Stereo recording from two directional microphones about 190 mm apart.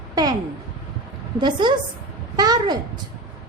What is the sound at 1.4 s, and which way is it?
A woman's voice, 25° right (ahead or behind).